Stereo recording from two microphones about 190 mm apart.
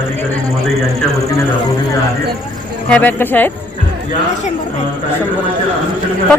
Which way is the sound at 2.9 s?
10° left (ahead or behind).